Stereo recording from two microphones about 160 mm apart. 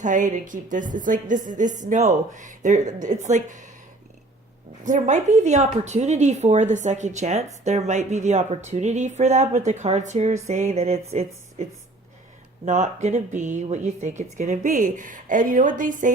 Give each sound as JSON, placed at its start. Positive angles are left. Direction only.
{"t": 0.0, "sound": "a woman's voice", "side_deg": -55}
{"t": 4.9, "sound": "a woman's voice", "side_deg": -50}